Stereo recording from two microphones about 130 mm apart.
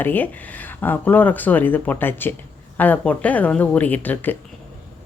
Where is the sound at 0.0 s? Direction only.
15° left (ahead or behind).